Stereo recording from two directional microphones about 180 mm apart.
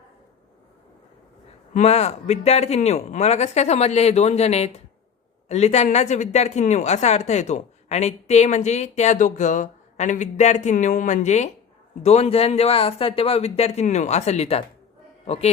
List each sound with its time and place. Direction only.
1.7 s a woman's voice: 35° left (ahead or behind)